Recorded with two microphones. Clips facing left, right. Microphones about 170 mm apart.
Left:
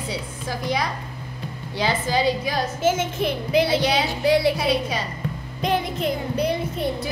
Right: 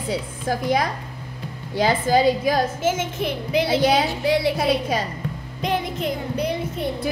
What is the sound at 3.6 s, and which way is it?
Speech, 50° right (ahead or behind).